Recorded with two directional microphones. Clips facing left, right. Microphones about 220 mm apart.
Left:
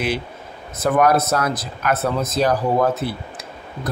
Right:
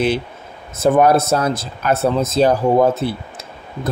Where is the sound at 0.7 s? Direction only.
25° right (ahead or behind).